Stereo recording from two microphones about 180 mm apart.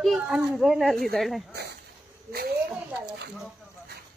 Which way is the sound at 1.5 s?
65° right (ahead or behind).